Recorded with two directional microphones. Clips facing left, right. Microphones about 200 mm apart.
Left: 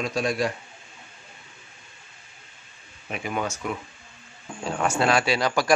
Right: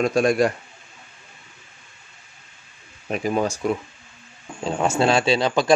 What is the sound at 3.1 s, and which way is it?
A man's voice, 35° right (ahead or behind).